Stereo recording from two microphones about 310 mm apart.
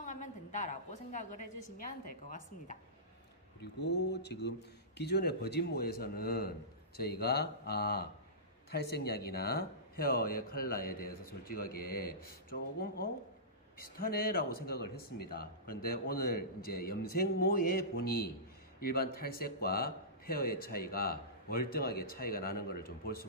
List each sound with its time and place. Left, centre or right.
0.0 s speech: left